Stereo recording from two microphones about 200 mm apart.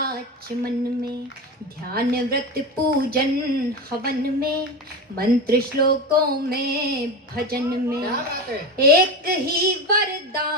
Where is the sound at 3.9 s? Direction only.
50° right (ahead or behind).